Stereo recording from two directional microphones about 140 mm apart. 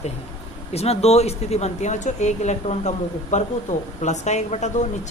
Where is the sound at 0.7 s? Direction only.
50° left (ahead or behind).